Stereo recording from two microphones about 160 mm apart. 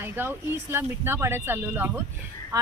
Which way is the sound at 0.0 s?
15° right (ahead or behind).